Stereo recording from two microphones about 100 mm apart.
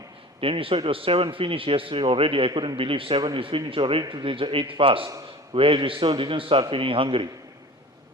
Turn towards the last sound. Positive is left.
turn(degrees=-60)  # may be behind; listen again after turning